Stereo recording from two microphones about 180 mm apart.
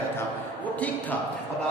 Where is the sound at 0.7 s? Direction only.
10° left (ahead or behind).